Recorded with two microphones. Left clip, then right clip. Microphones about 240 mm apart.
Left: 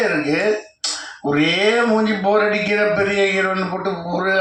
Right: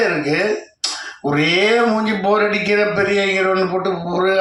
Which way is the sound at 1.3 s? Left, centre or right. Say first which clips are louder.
Right 1 dB; right.